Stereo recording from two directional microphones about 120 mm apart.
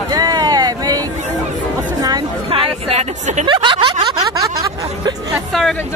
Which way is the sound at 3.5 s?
40° right (ahead or behind).